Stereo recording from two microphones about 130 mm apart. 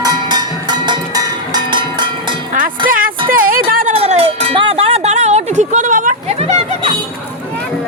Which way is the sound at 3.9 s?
50° right (ahead or behind).